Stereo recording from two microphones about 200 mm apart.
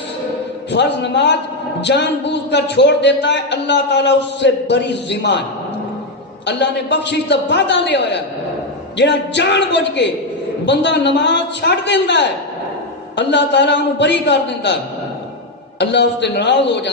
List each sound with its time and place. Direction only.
0.7 s a man's voice: 60° left (ahead or behind)
6.4 s a man's voice: 60° left (ahead or behind)
15.8 s a man's voice: 60° left (ahead or behind)